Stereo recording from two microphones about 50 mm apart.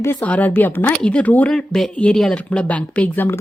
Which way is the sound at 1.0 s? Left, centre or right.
Left.